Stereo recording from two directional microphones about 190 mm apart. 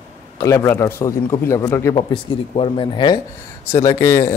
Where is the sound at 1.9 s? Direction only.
25° left (ahead or behind).